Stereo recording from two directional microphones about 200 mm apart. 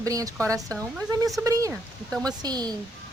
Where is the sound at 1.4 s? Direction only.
15° right (ahead or behind).